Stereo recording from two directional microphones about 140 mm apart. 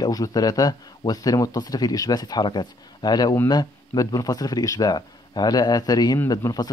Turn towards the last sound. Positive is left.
turn(degrees=30)  # may be behind; listen again after turning